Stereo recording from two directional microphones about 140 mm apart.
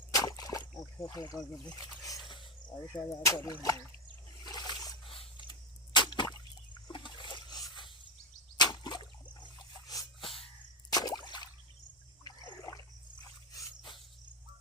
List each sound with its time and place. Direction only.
0.1 s a sound: 25° left (ahead or behind)
1.6 s speech: 25° left (ahead or behind)
3.2 s a sound: 25° left (ahead or behind)
6.8 s splash: 35° left (ahead or behind)
8.5 s a sound: 30° left (ahead or behind)
10.2 s sneeze: 40° left (ahead or behind)
10.8 s drip: 30° left (ahead or behind)
12.2 s toilet flush: 25° left (ahead or behind)
13.5 s dog: 30° left (ahead or behind)